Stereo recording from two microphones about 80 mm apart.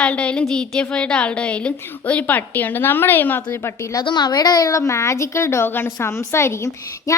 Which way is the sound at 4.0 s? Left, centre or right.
Left.